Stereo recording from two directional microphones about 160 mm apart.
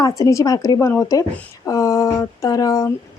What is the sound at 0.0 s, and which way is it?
Speech, 20° left (ahead or behind).